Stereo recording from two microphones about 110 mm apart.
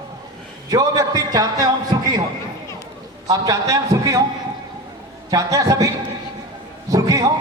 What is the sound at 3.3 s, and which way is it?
Speech, 30° right (ahead or behind).